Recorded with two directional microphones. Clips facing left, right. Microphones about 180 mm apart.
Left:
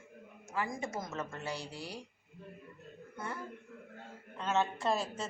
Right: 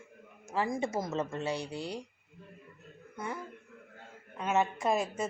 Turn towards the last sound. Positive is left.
turn(degrees=-15)  # may be behind; listen again after turning